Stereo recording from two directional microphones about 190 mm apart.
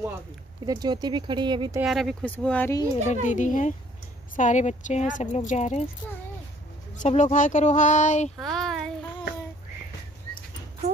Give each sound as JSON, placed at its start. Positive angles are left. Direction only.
{"t": 0.7, "sound": "speech", "side_deg": -20}
{"t": 1.8, "sound": "speech", "side_deg": 0}
{"t": 3.1, "sound": "speech", "side_deg": 40}
{"t": 7.0, "sound": "speech", "side_deg": 40}
{"t": 8.4, "sound": "a sound", "side_deg": 0}